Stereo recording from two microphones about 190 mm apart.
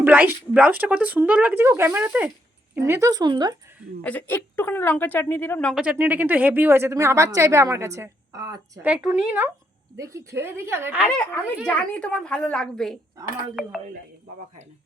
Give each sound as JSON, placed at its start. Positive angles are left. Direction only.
{"t": 0.0, "sound": "speech", "side_deg": -10}
{"t": 4.0, "sound": "a woman's voice", "side_deg": 10}
{"t": 5.8, "sound": "speech", "side_deg": -10}
{"t": 11.3, "sound": "a woman's voice", "side_deg": 5}